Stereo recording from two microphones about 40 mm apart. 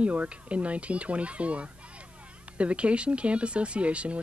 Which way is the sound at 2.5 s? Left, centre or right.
Right.